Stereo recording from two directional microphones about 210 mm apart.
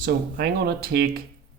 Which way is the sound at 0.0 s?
45° right (ahead or behind).